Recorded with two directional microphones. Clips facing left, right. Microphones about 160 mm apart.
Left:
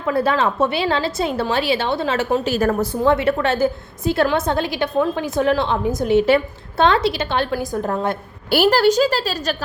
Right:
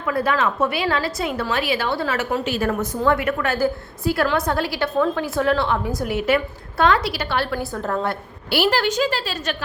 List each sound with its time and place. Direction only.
0.0 s a woman's voice: 30° left (ahead or behind)
2.5 s a woman's voice: 40° left (ahead or behind)
3.0 s a woman's voice: 25° left (ahead or behind)
8.4 s a woman's voice: 45° left (ahead or behind)